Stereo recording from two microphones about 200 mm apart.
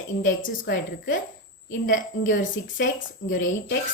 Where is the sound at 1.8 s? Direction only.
70° left (ahead or behind).